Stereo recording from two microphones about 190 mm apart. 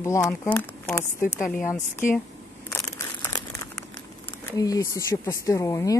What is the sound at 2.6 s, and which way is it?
Crumpling, 15° left (ahead or behind).